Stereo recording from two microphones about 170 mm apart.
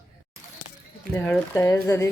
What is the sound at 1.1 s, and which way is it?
Speech, 10° left (ahead or behind).